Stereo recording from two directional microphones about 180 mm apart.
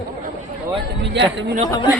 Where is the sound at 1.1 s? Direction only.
75° right (ahead or behind).